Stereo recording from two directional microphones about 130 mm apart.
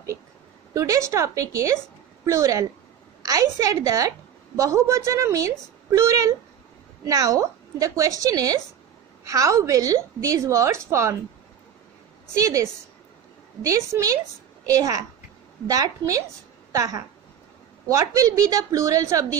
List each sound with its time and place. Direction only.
0.7 s a woman's voice: 25° right (ahead or behind)
12.4 s a woman's voice: 25° right (ahead or behind)